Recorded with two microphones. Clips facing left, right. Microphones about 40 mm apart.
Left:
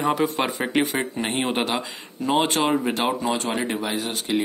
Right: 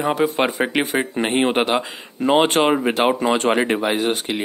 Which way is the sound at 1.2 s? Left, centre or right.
Right.